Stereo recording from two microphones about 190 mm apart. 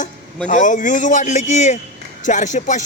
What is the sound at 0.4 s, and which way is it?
Speech, 40° left (ahead or behind).